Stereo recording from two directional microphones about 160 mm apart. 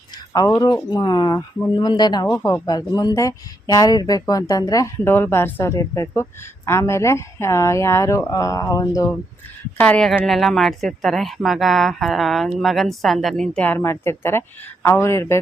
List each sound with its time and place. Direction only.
0.3 s speech: 25° left (ahead or behind)
9.7 s speech: 10° left (ahead or behind)